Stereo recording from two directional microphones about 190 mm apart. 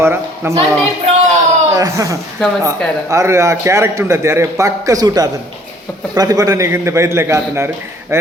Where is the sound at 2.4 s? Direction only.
5° left (ahead or behind).